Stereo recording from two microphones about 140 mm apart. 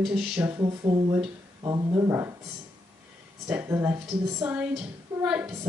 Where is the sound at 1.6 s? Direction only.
25° right (ahead or behind).